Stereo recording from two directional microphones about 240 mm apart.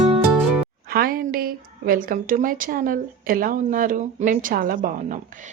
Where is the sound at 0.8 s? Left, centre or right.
Right.